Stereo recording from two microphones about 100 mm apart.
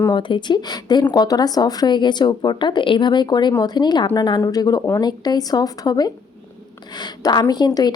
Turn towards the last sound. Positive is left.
turn(degrees=45)  # may be behind; listen again after turning